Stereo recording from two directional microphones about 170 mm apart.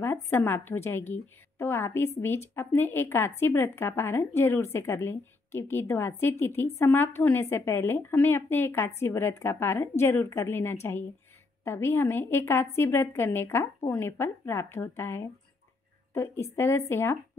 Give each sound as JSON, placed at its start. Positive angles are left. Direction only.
{"t": 0.0, "sound": "a woman's voice", "side_deg": 15}